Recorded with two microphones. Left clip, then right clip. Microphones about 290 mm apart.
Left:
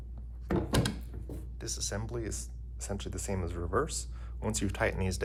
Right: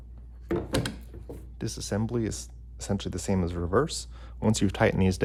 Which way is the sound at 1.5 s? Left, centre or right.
Right.